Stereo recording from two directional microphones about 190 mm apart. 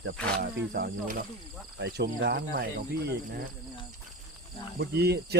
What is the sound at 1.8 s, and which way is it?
Cricket, 65° right (ahead or behind).